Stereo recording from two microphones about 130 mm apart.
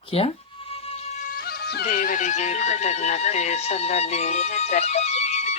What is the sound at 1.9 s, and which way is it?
Speech, 90° left.